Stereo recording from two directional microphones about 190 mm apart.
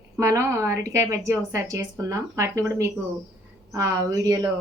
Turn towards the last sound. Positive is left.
turn(degrees=-20)  # may be behind; listen again after turning